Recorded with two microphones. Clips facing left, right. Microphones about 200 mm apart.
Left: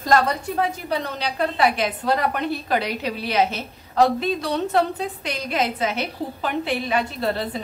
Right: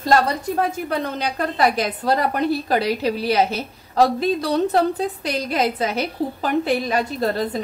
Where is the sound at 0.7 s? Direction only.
50° right (ahead or behind).